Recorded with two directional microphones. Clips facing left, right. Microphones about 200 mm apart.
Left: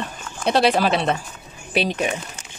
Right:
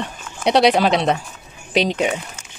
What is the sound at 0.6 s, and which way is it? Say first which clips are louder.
Speech: right 3 dB; 15° right (ahead or behind).